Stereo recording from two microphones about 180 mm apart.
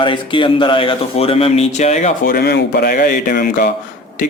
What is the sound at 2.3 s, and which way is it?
Speech, 60° left (ahead or behind).